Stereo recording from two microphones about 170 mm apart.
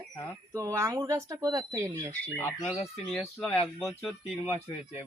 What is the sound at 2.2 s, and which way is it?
Speech, 10° left (ahead or behind).